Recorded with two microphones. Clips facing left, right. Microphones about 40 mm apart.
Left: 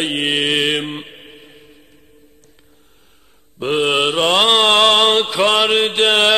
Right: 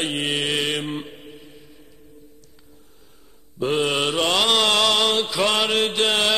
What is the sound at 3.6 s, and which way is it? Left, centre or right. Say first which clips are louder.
Mantra: left 5 dB; left.